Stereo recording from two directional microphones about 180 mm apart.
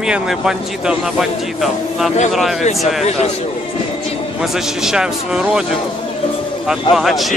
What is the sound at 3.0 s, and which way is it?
Speech, 35° left (ahead or behind).